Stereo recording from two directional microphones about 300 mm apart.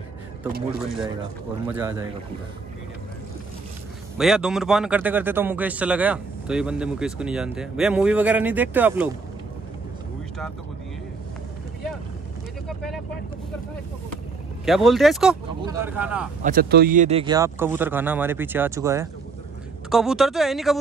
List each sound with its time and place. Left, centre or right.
1.7 s speech: centre
4.2 s speech: centre
12.6 s vehicle: centre
14.6 s speech: centre
16.4 s speech: right; by 20.7 s centre